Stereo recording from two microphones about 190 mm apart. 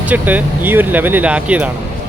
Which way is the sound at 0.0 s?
10° right (ahead or behind).